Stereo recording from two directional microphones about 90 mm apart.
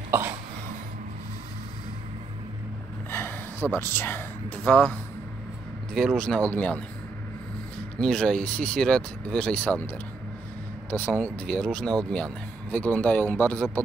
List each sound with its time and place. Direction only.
3.1 s gasp: 25° left (ahead or behind)
3.7 s speech: 25° left (ahead or behind)
4.6 s speech: 15° left (ahead or behind)
5.9 s speech: 5° left (ahead or behind)
8.0 s speech: 5° left (ahead or behind)
10.9 s speech: 15° left (ahead or behind)